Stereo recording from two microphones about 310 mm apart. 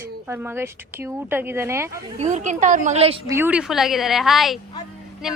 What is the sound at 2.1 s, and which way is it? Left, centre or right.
A woman's voice, right.